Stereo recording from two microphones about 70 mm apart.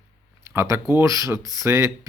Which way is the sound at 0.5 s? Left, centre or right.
Right.